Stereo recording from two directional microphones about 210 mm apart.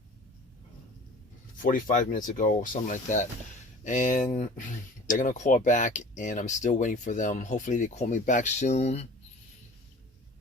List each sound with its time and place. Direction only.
1.6 s speech: 40° left (ahead or behind)